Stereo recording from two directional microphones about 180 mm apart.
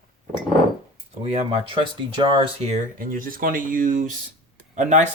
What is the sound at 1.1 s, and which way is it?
Speech, 35° right (ahead or behind).